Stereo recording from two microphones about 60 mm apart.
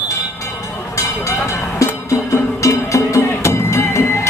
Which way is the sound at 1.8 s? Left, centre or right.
Left.